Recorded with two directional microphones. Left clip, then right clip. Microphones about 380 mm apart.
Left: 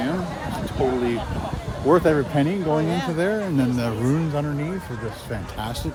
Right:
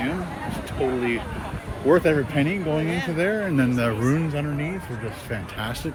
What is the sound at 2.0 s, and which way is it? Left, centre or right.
Speech, left.